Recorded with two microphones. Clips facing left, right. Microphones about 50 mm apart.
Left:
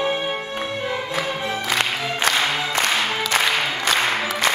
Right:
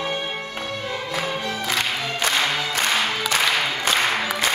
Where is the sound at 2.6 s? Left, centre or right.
Left.